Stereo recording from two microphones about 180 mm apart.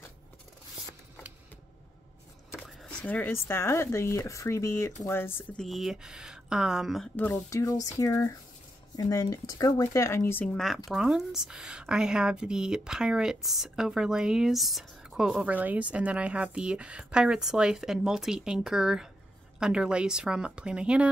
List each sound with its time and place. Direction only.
2.5 s speech: 5° left (ahead or behind)